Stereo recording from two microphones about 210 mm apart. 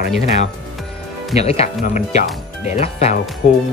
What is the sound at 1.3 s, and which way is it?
Speech, 30° left (ahead or behind).